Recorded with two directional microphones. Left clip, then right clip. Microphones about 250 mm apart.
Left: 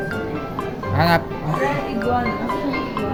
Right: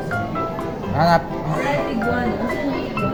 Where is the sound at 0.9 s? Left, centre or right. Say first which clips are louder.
Right 1 dB; centre.